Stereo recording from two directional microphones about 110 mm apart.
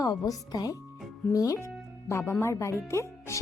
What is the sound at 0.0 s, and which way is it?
Speech, 35° left (ahead or behind).